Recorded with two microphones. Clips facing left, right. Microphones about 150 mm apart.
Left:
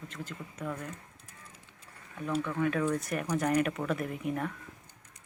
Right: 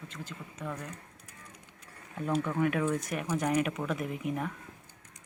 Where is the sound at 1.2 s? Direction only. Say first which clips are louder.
Right 2 dB; 25° left (ahead or behind).